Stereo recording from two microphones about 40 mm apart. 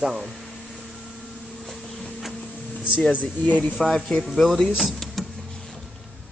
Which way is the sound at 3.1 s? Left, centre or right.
Left.